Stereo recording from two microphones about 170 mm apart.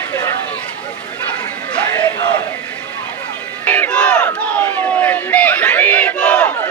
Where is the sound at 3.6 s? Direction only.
10° left (ahead or behind).